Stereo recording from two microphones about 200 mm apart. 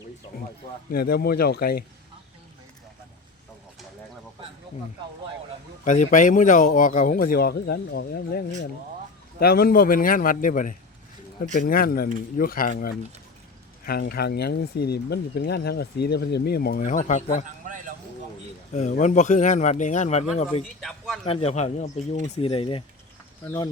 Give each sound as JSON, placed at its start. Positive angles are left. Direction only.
{"t": 0.9, "sound": "speech", "side_deg": 50}
{"t": 5.8, "sound": "speech", "side_deg": 35}
{"t": 17.4, "sound": "a man's voice", "side_deg": -40}
{"t": 18.7, "sound": "speech", "side_deg": 35}